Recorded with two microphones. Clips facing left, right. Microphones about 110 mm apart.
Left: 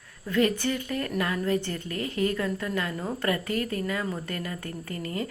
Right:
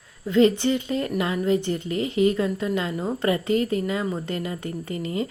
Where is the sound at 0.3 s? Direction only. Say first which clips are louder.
Right 6 dB; 20° right (ahead or behind).